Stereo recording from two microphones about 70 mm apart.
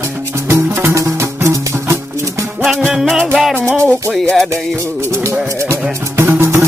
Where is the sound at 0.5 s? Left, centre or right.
Right.